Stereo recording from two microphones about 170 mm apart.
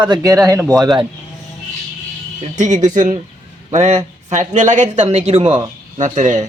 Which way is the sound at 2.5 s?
45° right (ahead or behind).